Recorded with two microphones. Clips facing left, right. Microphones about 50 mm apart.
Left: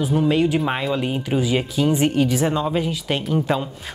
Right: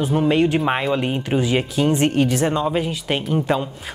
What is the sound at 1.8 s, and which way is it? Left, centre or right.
Speech, centre.